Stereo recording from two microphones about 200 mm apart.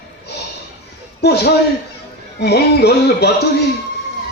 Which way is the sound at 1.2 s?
55° left (ahead or behind).